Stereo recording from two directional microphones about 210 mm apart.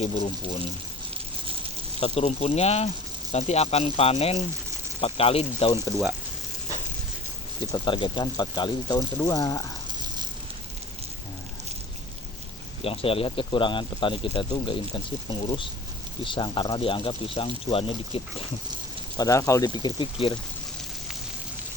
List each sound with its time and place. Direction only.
2.0 s speech: 30° left (ahead or behind)
7.6 s speech: 20° left (ahead or behind)
12.8 s speech: 25° left (ahead or behind)
19.1 s speech: 15° left (ahead or behind)